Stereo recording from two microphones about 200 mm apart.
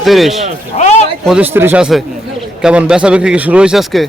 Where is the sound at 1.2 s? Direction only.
5° right (ahead or behind).